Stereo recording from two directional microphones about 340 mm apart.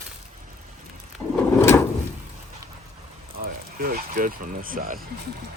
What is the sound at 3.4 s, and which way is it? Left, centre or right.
Speech, right.